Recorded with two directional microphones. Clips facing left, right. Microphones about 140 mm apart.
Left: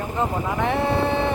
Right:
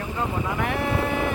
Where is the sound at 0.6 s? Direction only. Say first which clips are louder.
Left 5 dB; 25° left (ahead or behind).